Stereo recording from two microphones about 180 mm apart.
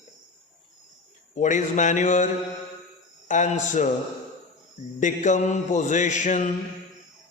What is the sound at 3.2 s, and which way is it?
Speech, 45° left (ahead or behind).